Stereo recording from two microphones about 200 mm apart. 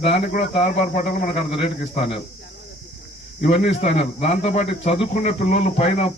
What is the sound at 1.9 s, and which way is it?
Speech, 30° left (ahead or behind).